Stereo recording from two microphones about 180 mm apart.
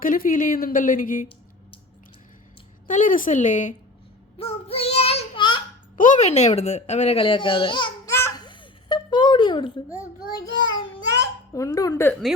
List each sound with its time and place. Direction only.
0.0 s a woman's voice: 50° left (ahead or behind)
2.8 s a woman's voice: 45° left (ahead or behind)
4.4 s child singing: 35° left (ahead or behind)
6.0 s a child's voice: 45° left (ahead or behind); by 8.1 s 25° left (ahead or behind)
8.1 s babbling: 15° left (ahead or behind)
8.4 s a sound: 25° left (ahead or behind)